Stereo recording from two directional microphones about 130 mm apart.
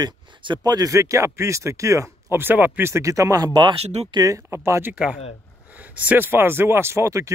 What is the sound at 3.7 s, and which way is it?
Speech, 55° right (ahead or behind).